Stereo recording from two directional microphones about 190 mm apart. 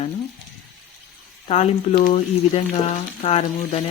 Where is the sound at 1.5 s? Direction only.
35° left (ahead or behind).